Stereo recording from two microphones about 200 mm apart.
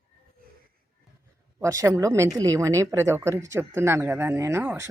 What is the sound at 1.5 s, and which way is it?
A woman's voice, 15° right (ahead or behind).